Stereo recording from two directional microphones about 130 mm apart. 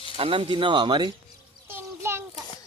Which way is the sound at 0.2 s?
45° right (ahead or behind).